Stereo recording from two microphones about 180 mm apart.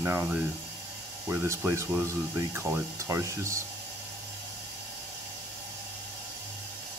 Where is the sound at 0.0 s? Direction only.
15° right (ahead or behind).